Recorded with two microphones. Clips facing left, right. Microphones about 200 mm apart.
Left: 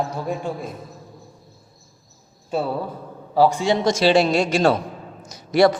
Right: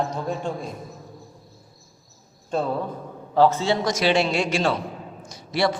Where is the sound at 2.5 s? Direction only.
10° left (ahead or behind).